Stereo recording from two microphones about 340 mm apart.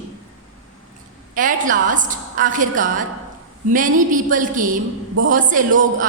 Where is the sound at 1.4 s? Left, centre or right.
Right.